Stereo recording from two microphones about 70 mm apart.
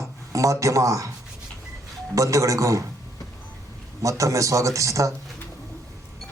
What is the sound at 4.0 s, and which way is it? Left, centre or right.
Speech, right.